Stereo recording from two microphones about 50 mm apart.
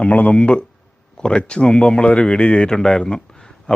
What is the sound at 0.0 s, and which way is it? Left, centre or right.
Speech, left.